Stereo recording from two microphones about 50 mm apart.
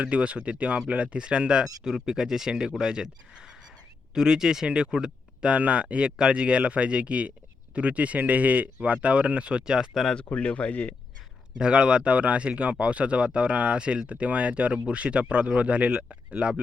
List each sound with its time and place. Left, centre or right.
0.0 s speech: right
9.9 s speech: centre
10.3 s speech: left
11.5 s speech: right